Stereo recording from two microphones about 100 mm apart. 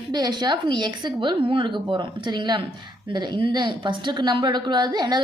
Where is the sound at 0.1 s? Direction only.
45° right (ahead or behind).